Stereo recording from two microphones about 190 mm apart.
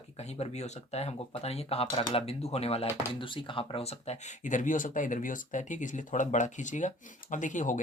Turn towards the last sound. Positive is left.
turn(degrees=40)  # may be behind; listen again after turning